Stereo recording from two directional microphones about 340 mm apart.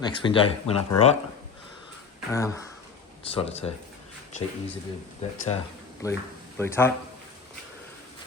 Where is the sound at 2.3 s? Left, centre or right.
Centre.